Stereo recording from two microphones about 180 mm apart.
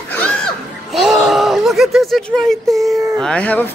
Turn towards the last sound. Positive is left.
turn(degrees=10)  # may be behind; listen again after turning